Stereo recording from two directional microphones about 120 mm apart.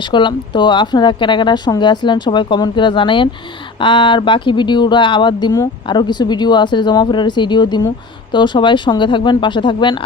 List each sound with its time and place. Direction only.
0.1 s speech: 40° left (ahead or behind)